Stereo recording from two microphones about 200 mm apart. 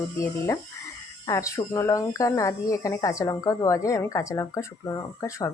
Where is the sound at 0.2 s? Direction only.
15° left (ahead or behind).